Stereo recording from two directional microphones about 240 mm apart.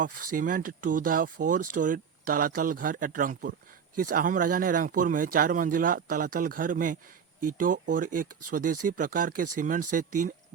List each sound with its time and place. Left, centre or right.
0.0 s speech: right